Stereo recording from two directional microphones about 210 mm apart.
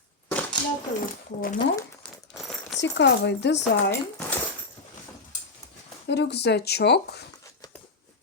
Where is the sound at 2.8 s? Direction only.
55° left (ahead or behind).